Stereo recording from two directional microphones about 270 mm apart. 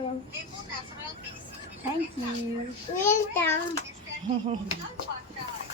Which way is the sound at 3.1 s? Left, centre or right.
Centre.